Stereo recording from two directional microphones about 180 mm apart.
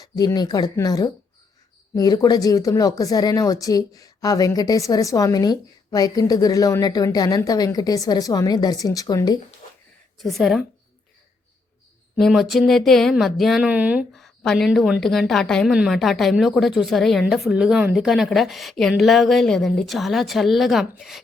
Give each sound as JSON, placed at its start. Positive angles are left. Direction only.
{"t": 0.0, "sound": "a woman's voice", "side_deg": 20}
{"t": 10.2, "sound": "speech", "side_deg": 0}
{"t": 12.1, "sound": "speech", "side_deg": 0}